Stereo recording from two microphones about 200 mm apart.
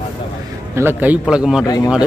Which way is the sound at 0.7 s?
10° right (ahead or behind).